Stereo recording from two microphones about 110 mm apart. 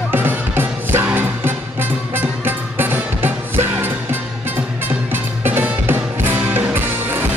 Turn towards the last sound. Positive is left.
turn(degrees=-20)  # may be behind; listen again after turning